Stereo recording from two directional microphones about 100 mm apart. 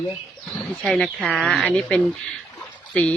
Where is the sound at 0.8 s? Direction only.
5° left (ahead or behind).